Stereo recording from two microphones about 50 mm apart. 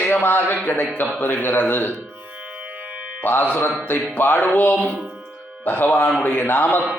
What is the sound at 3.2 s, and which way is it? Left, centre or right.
A man's voice, left.